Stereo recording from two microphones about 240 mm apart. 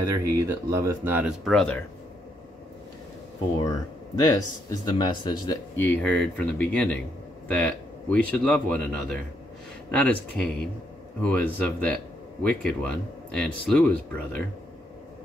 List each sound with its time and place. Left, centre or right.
0.0 s speech: centre
3.6 s speech: centre
5.8 s speech: centre